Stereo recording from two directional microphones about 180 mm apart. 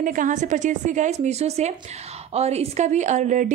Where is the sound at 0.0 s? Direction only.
45° right (ahead or behind).